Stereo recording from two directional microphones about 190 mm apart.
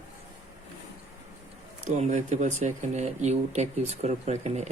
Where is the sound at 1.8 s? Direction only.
35° right (ahead or behind).